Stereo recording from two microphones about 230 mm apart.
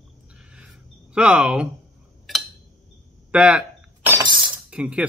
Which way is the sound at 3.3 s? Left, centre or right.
Centre.